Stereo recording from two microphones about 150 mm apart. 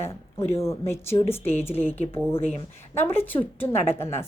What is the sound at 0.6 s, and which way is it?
A woman's voice, 15° left (ahead or behind).